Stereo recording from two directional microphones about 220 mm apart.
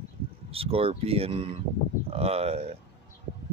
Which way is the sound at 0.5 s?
25° right (ahead or behind).